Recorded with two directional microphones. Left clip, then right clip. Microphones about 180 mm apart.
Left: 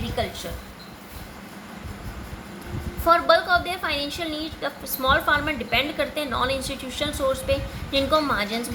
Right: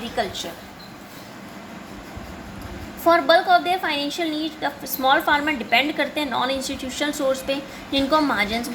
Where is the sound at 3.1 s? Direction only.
15° right (ahead or behind).